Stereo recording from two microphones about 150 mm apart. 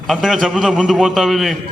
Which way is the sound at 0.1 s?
Centre (ahead or behind).